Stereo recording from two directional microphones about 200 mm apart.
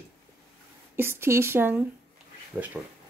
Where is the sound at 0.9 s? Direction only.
10° right (ahead or behind).